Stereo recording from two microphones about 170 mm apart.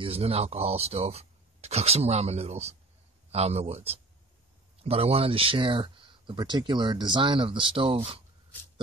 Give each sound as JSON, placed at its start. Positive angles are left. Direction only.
{"t": 0.0, "sound": "speech", "side_deg": -35}